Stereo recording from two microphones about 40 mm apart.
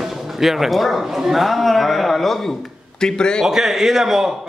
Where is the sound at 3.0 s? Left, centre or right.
Centre.